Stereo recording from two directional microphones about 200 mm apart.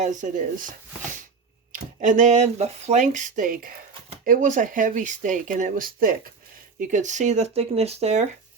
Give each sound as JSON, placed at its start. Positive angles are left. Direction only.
{"t": 0.0, "sound": "speech", "side_deg": -40}
{"t": 1.7, "sound": "speech", "side_deg": -40}